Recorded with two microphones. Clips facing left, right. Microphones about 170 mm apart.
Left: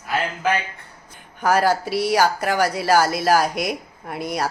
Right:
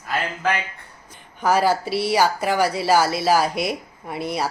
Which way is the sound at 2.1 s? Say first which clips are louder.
Even; centre (ahead or behind).